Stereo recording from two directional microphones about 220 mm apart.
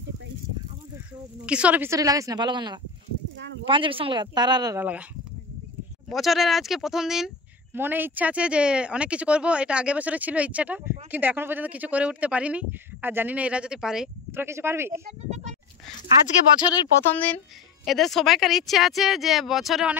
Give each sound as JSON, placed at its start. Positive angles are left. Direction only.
{"t": 1.4, "sound": "speech", "side_deg": -5}
{"t": 6.0, "sound": "speech", "side_deg": 0}
{"t": 15.2, "sound": "speech", "side_deg": -30}
{"t": 16.6, "sound": "speech", "side_deg": 20}
{"t": 17.8, "sound": "speech", "side_deg": 0}